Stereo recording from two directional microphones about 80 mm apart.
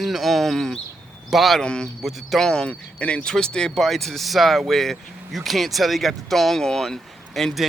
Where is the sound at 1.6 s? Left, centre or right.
Centre.